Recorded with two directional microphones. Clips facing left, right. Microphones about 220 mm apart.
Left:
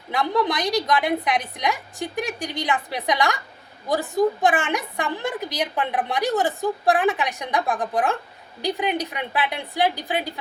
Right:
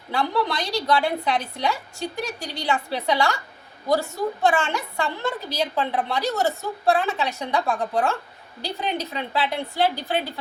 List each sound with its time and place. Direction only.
0.1 s a woman's voice: 20° left (ahead or behind)